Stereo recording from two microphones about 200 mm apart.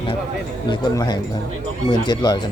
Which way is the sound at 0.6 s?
20° left (ahead or behind).